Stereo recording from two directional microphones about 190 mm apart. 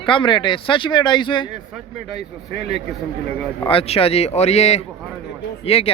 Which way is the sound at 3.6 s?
30° left (ahead or behind).